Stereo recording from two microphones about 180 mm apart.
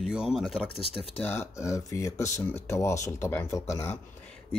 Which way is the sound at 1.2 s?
15° left (ahead or behind).